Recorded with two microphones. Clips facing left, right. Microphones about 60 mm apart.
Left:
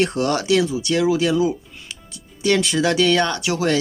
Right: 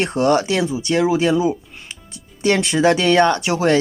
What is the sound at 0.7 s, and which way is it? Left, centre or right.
Speech, right.